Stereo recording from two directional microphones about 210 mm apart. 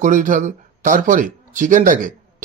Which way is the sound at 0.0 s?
35° right (ahead or behind).